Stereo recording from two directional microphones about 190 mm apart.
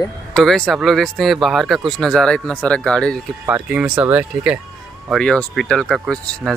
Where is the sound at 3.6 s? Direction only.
5° right (ahead or behind).